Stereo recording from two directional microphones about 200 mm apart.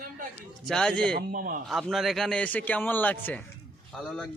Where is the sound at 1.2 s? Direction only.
45° right (ahead or behind).